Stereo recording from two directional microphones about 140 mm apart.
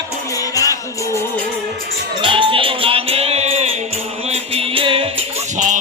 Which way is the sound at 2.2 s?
35° right (ahead or behind).